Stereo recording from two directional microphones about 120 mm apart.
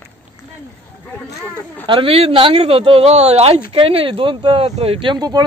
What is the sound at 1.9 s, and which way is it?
Speech, 50° right (ahead or behind).